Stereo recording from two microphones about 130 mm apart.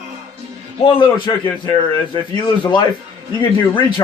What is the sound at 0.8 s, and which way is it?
A man's voice, 45° left (ahead or behind).